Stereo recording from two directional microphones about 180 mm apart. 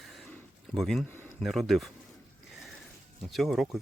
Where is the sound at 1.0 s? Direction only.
10° left (ahead or behind).